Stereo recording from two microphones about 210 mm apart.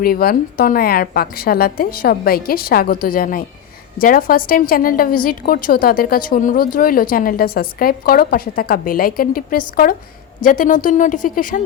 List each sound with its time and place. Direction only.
0.0 s a woman's voice: 45° left (ahead or behind)